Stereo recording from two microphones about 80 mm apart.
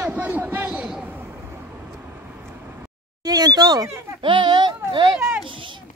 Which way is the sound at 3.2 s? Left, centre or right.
Right.